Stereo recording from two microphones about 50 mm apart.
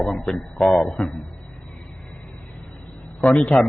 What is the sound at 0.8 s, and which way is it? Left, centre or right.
Speech, centre.